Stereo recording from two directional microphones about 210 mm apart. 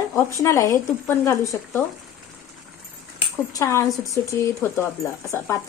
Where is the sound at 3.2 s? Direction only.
15° left (ahead or behind).